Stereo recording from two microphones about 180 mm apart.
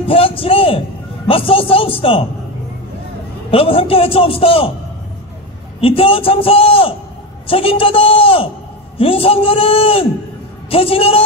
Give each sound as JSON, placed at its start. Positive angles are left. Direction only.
{"t": 0.1, "sound": "a man's voice", "side_deg": 30}
{"t": 3.5, "sound": "a man's voice", "side_deg": 30}
{"t": 5.8, "sound": "a man's voice", "side_deg": 30}